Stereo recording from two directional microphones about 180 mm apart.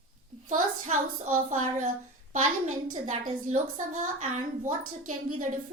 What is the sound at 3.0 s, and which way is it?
A woman's voice, 40° right (ahead or behind).